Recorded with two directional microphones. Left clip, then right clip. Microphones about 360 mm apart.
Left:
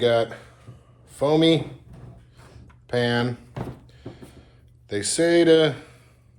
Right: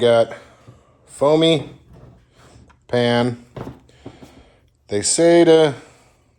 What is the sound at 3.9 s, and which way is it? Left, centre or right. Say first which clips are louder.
Music: right 2 dB; centre.